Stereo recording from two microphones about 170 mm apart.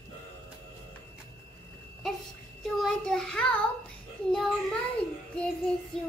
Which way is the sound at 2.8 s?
5° left (ahead or behind).